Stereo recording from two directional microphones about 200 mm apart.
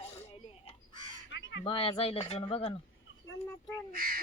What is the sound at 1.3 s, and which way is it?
Fowl, 65° left (ahead or behind).